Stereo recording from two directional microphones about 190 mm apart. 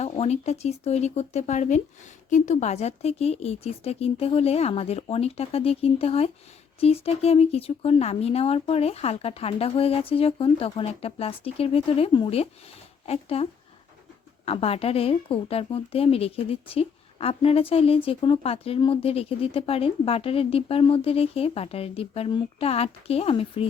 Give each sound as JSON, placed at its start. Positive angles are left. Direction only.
{"t": 0.0, "sound": "a woman's voice", "side_deg": 35}